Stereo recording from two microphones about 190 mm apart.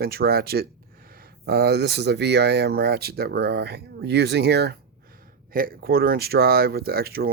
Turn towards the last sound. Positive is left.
turn(degrees=-55)  # may be behind; listen again after turning